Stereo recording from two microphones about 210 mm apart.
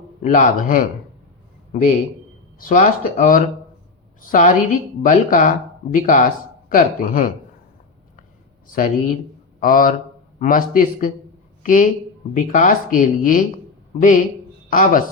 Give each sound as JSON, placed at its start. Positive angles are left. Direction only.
{"t": 0.2, "sound": "speech", "side_deg": 35}
{"t": 2.6, "sound": "speech", "side_deg": 40}
{"t": 8.6, "sound": "a man's voice", "side_deg": 40}
{"t": 14.7, "sound": "speech", "side_deg": 40}